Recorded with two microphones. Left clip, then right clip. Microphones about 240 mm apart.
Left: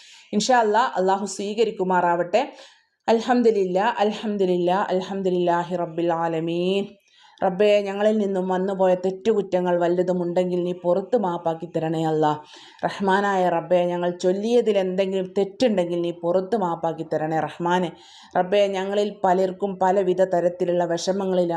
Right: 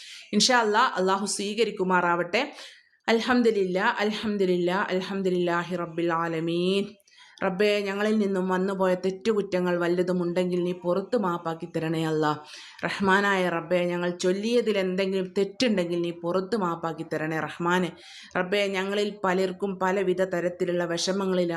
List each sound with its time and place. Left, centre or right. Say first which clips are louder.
0.3 s speech: left 3 dB; centre
10.4 s speech: left 3 dB; right
10.9 s speech: left 4 dB; centre